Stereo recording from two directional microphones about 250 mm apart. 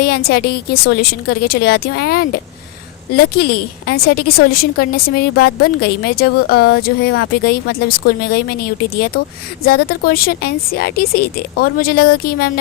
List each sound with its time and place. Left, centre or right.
0.0 s a woman's voice: left
9.6 s a woman's voice: left